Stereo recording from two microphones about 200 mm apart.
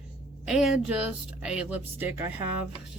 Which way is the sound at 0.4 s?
Centre (ahead or behind).